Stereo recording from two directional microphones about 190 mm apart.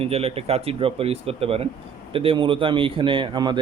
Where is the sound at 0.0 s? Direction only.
30° right (ahead or behind).